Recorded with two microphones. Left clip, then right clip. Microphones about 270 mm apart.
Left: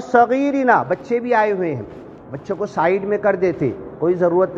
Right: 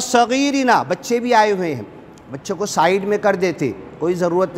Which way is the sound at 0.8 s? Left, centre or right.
Right.